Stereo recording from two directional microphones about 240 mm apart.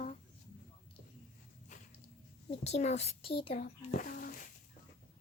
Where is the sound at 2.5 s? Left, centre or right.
Left.